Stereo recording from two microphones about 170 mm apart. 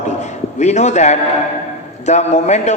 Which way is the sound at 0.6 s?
40° left (ahead or behind).